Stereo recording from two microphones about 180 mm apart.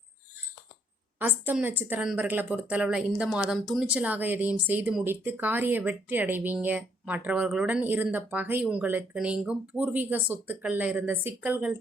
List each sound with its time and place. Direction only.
1.2 s a woman's voice: 10° right (ahead or behind)